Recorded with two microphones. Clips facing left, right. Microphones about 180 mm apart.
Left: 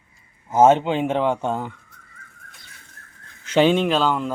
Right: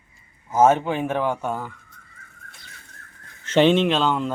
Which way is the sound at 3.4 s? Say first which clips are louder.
Even; 5° left (ahead or behind).